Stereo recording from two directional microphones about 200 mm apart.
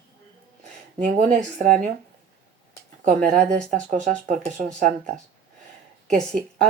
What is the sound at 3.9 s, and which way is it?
Speech, 35° right (ahead or behind).